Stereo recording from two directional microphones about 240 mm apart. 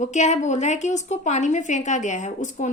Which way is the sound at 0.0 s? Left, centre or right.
Left.